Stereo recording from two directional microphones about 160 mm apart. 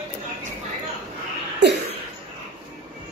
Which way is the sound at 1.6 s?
90° right.